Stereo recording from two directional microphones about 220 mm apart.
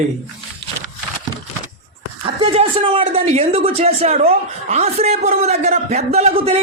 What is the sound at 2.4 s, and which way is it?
Speech, 25° right (ahead or behind).